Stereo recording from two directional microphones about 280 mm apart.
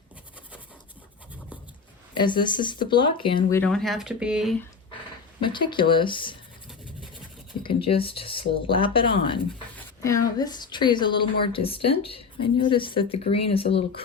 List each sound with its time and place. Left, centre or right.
2.1 s a woman's voice: centre
3.6 s speech: centre
5.4 s a woman's voice: centre
7.6 s a woman's voice: centre
9.7 s a sound: centre
10.3 s a woman's voice: centre